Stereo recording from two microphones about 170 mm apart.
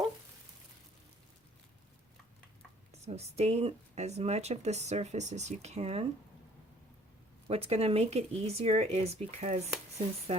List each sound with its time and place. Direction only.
3.0 s speech: 40° right (ahead or behind)
7.4 s speech: 35° right (ahead or behind)